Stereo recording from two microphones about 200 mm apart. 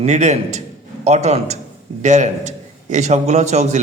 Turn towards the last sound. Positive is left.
turn(degrees=-35)  # may be behind; listen again after turning